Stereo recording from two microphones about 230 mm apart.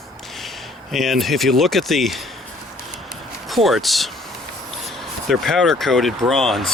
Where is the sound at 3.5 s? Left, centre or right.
Centre.